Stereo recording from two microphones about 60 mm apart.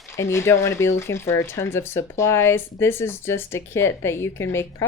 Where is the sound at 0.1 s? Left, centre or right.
Left.